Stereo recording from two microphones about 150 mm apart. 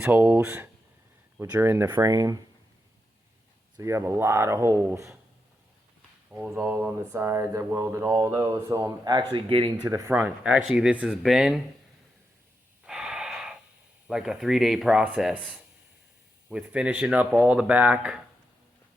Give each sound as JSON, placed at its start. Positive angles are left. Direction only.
{"t": 0.0, "sound": "speech", "side_deg": -10}
{"t": 3.8, "sound": "speech", "side_deg": -20}
{"t": 6.3, "sound": "speech", "side_deg": -15}
{"t": 9.9, "sound": "speech", "side_deg": -20}
{"t": 12.8, "sound": "breathing", "side_deg": -5}
{"t": 14.1, "sound": "speech", "side_deg": -5}